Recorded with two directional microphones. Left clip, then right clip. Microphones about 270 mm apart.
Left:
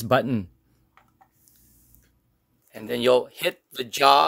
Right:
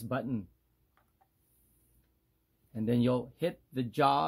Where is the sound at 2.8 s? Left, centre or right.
Left.